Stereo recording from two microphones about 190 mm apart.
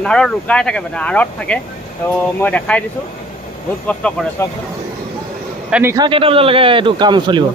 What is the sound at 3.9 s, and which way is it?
Speech, 5° left (ahead or behind).